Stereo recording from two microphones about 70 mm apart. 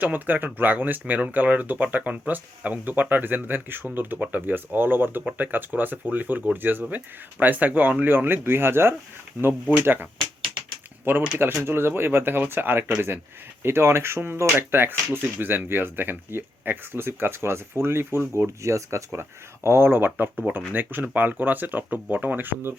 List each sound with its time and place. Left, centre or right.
0.0 s speech: right
11.3 s speech: right